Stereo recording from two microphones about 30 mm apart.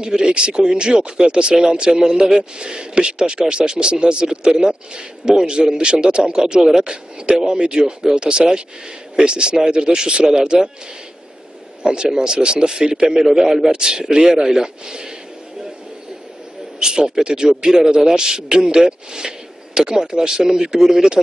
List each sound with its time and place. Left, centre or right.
0.0 s speech: right
7.8 s speech: centre
8.2 s speech: right
11.8 s a man's voice: right
16.8 s speech: right